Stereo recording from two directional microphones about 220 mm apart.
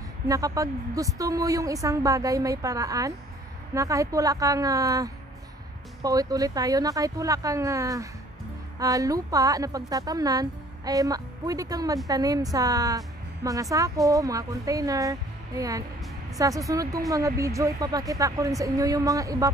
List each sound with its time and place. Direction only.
0.3 s a woman's voice: 15° right (ahead or behind)